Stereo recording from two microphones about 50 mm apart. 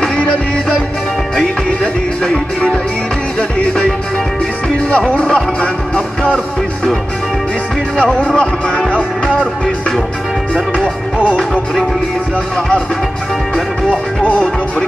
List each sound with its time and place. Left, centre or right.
3.3 s music: centre
4.9 s music: centre
8.3 s music: centre
12.5 s music: centre
14.2 s music: left